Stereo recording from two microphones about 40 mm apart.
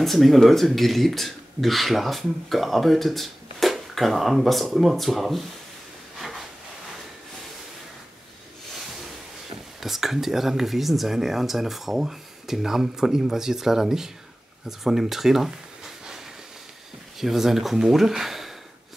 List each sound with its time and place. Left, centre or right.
0.0 s speech: centre
6.1 s a sound: centre
9.8 s speech: centre
17.2 s speech: centre